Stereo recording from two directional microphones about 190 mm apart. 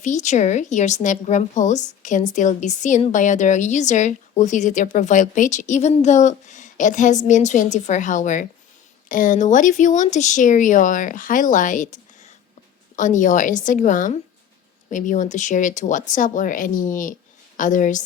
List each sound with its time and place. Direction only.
0.0 s a woman's voice: 40° left (ahead or behind)